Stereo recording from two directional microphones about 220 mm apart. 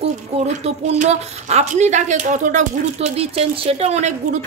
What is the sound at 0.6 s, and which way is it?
A woman's voice, 30° right (ahead or behind).